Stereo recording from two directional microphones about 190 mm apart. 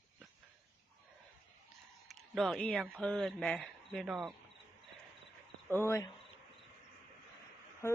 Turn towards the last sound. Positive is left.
turn(degrees=10)  # may be behind; listen again after turning